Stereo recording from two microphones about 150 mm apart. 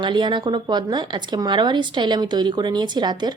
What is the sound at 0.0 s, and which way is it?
A woman's voice, 30° right (ahead or behind).